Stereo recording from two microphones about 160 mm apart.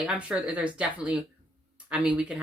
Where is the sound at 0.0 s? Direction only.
5° right (ahead or behind).